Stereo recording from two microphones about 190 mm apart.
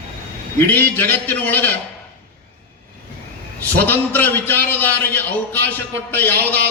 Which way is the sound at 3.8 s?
10° left (ahead or behind).